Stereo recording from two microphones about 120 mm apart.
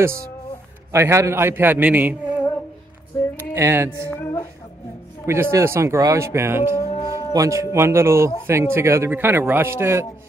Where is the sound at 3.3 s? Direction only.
20° right (ahead or behind).